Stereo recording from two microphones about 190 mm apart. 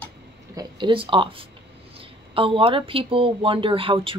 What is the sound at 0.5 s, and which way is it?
Speech, 25° right (ahead or behind).